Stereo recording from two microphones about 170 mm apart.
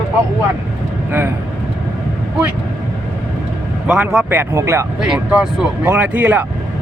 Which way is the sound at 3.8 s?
5° right (ahead or behind).